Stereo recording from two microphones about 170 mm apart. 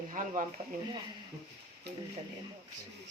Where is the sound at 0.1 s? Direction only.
50° right (ahead or behind).